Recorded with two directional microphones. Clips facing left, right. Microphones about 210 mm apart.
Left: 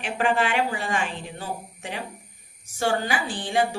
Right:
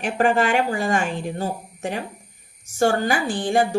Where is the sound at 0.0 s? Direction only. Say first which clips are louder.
Right 4 dB; 45° right (ahead or behind).